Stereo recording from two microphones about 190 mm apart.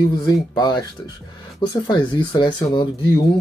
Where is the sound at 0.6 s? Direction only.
20° left (ahead or behind).